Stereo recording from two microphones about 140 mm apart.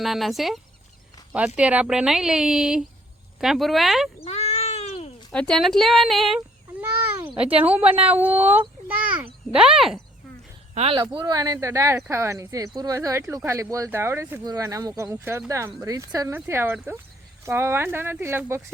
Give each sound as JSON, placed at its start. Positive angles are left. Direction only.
{"t": 0.0, "sound": "speech", "side_deg": 0}
{"t": 4.2, "sound": "cat", "side_deg": 50}
{"t": 5.3, "sound": "speech", "side_deg": 5}
{"t": 6.8, "sound": "speech", "side_deg": -15}
{"t": 10.9, "sound": "speech", "side_deg": -35}